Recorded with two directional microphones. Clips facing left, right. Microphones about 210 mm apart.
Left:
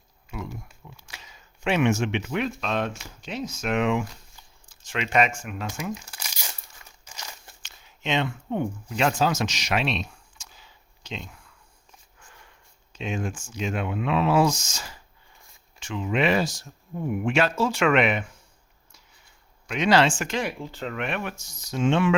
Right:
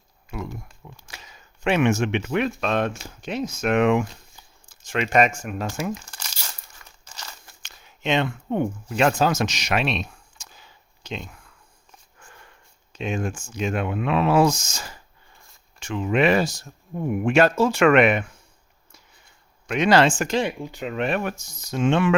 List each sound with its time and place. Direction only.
0.9 s speech: 45° right (ahead or behind)
6.1 s crumpling: 5° left (ahead or behind)
7.0 s a sound: 10° left (ahead or behind)
7.6 s a sound: 50° right (ahead or behind)
12.9 s speech: 50° right (ahead or behind)
19.6 s speech: 55° right (ahead or behind)
20.4 s speech: 20° right (ahead or behind)
20.9 s speech: 35° right (ahead or behind); by 22.1 s 55° right (ahead or behind)